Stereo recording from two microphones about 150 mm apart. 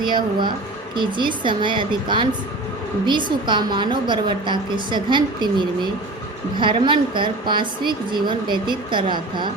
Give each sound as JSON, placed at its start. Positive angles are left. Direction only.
{"t": 0.0, "sound": "a woman's voice", "side_deg": -30}